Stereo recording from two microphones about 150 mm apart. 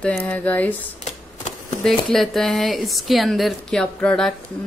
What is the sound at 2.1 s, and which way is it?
A woman's voice, centre (ahead or behind).